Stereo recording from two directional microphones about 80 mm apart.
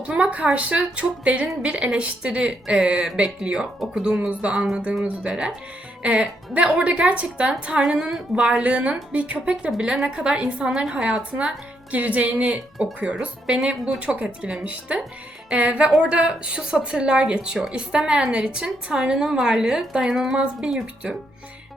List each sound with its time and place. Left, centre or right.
0.0 s a woman's voice: centre